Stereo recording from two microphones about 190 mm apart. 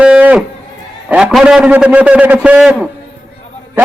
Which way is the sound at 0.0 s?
5° right (ahead or behind).